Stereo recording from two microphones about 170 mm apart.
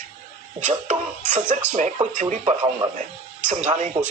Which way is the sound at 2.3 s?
40° right (ahead or behind).